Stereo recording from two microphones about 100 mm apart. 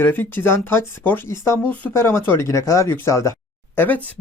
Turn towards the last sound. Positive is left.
turn(degrees=20)  # may be behind; listen again after turning